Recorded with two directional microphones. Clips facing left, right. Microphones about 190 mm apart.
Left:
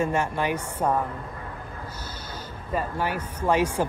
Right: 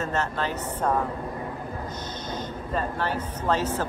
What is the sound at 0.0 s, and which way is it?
A woman's voice, 10° left (ahead or behind).